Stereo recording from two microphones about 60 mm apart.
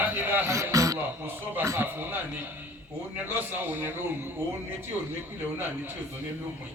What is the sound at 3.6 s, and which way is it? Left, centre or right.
Speech, right.